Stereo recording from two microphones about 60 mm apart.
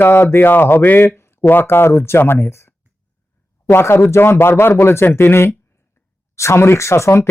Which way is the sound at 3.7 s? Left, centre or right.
Left.